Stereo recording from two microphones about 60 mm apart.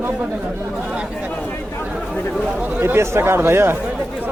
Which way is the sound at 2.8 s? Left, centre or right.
Right.